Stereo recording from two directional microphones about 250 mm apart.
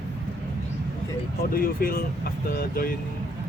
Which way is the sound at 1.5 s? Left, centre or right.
Left.